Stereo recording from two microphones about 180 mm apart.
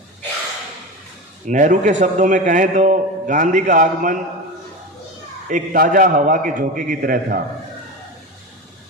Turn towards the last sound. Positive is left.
turn(degrees=-50)  # may be behind; listen again after turning